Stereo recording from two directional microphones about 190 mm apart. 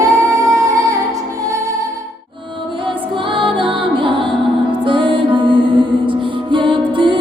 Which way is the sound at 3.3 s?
25° right (ahead or behind).